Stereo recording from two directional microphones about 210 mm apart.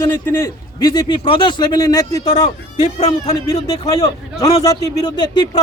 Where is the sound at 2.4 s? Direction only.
30° left (ahead or behind).